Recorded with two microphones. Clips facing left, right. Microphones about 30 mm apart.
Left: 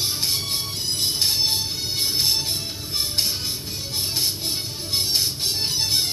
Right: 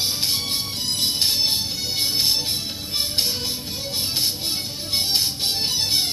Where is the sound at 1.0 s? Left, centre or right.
Right.